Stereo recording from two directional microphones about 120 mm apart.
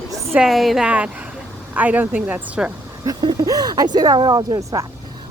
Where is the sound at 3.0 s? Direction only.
35° right (ahead or behind).